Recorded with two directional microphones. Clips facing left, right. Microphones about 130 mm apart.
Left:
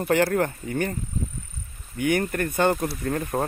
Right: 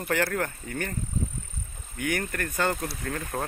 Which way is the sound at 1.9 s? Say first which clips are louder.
Left 6 dB; 25° left (ahead or behind).